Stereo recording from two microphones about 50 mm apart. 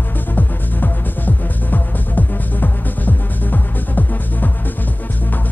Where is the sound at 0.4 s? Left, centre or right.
Left.